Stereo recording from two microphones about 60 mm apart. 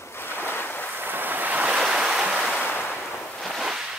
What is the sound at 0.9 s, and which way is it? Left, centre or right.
Waves, right.